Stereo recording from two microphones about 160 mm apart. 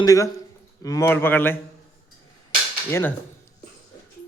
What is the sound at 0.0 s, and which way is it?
A man's voice, 20° left (ahead or behind).